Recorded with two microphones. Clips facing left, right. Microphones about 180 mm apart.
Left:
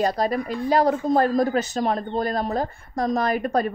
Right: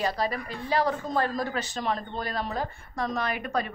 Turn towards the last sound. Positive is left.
turn(degrees=40)  # may be behind; listen again after turning